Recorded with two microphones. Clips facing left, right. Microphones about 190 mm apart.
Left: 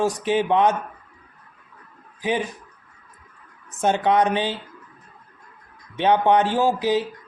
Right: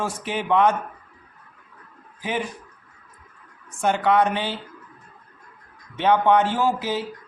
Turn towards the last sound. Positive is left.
turn(degrees=15)  # may be behind; listen again after turning